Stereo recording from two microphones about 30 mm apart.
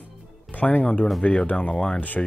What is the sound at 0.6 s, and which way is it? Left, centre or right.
Speech, left.